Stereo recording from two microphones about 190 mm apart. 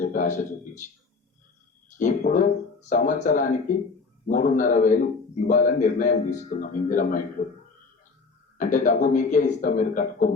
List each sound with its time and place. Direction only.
0.0 s speech: 40° left (ahead or behind)
2.0 s a man's voice: 40° left (ahead or behind)
8.5 s a man's voice: 40° left (ahead or behind)